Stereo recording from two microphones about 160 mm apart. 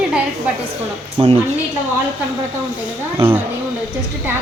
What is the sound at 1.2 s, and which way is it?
Speech, 35° right (ahead or behind).